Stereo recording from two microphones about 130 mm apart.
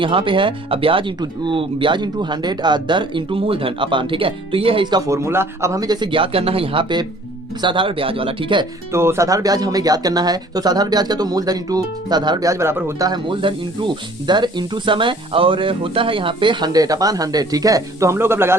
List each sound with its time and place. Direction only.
0.0 s speech: 40° right (ahead or behind)
8.9 s speech: 20° right (ahead or behind)
13.1 s speech: 40° right (ahead or behind); by 18.5 s 20° right (ahead or behind)